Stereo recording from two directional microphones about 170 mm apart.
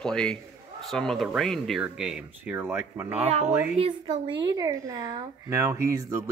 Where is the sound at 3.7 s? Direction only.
35° right (ahead or behind).